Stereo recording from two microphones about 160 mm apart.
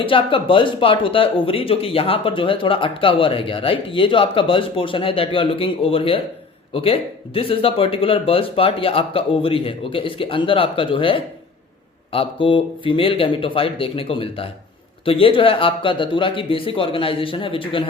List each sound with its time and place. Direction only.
0.0 s speech: 35° left (ahead or behind)